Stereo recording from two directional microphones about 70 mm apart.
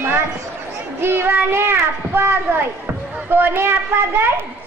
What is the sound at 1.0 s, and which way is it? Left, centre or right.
Child singing, right.